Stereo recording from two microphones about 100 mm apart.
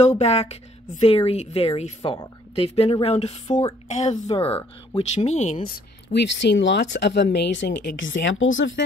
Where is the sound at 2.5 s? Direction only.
85° left.